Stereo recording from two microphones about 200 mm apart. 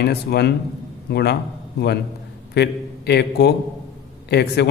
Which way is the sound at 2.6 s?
55° left (ahead or behind).